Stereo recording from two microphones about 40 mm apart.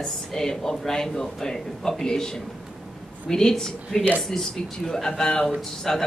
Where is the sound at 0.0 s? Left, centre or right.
Centre.